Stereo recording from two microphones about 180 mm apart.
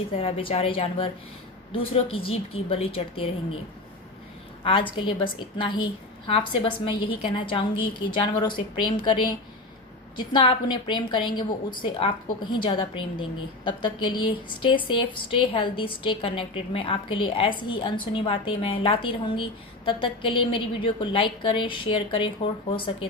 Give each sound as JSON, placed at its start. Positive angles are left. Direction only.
{"t": 0.2, "sound": "a woman's voice", "side_deg": 35}
{"t": 4.6, "sound": "a woman's voice", "side_deg": 30}